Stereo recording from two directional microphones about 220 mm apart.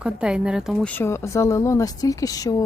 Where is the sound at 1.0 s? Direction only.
10° left (ahead or behind).